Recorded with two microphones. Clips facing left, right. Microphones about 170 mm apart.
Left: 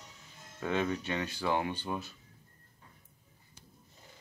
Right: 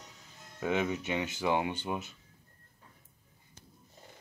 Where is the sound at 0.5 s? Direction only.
15° right (ahead or behind).